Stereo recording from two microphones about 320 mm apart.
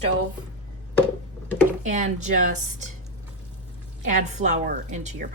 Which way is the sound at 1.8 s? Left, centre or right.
Right.